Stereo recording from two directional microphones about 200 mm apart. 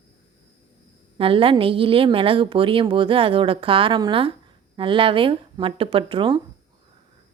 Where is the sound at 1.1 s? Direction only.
25° right (ahead or behind).